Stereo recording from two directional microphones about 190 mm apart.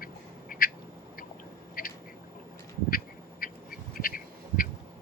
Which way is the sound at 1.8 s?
50° left (ahead or behind).